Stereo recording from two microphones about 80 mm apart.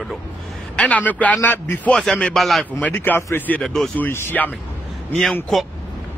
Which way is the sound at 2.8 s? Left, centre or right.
Left.